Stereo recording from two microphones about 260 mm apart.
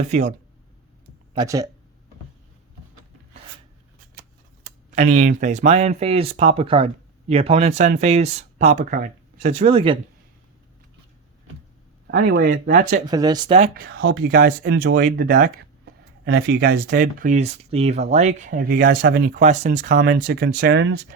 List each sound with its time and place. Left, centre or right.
0.1 s speech: right
1.4 s speech: centre
4.9 s speech: right
12.2 s speech: right
13.1 s speech: centre
13.7 s speech: right